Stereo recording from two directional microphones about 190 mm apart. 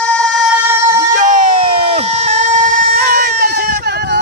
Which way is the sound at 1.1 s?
45° right (ahead or behind).